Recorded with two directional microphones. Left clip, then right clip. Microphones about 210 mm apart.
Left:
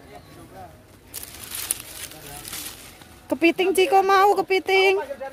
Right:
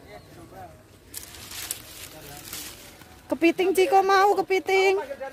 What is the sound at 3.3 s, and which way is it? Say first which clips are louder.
Speech: left 2 dB; centre (ahead or behind).